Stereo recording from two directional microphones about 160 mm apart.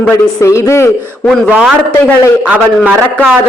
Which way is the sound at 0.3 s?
20° left (ahead or behind).